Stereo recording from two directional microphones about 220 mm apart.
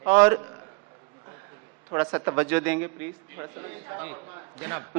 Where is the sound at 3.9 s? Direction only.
20° right (ahead or behind).